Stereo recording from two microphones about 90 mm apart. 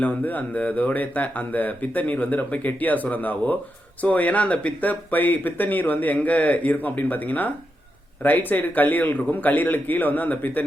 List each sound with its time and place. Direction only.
0.0 s speech: 20° left (ahead or behind)